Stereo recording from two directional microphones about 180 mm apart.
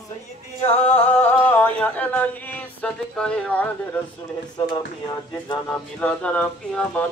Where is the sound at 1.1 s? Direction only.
10° left (ahead or behind).